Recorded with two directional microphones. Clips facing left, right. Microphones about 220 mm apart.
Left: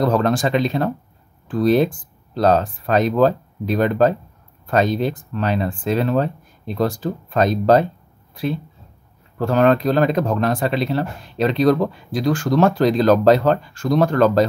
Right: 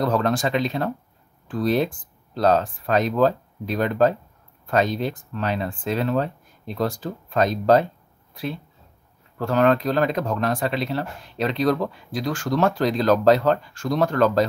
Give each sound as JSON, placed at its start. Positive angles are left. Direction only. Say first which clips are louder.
{"t": 0.0, "sound": "speech", "louder": "left 4 dB", "side_deg": 35}
{"t": 9.4, "sound": "speech", "louder": "left 3 dB", "side_deg": 35}